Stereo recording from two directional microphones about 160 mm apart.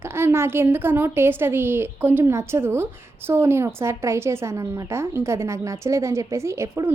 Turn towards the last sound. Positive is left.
turn(degrees=-15)  # may be behind; listen again after turning